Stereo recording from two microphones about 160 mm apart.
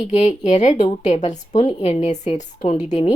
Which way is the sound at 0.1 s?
45° left (ahead or behind).